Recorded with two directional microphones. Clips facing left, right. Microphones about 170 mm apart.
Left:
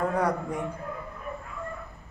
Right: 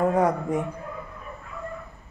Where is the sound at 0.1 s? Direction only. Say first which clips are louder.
Right 5 dB; 20° right (ahead or behind).